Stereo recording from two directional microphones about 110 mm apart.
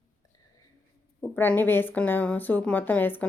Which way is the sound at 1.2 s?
15° left (ahead or behind).